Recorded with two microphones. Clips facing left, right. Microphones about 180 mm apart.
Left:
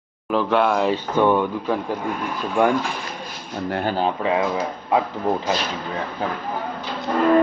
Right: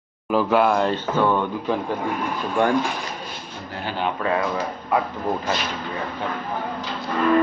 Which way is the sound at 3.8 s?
40° left (ahead or behind).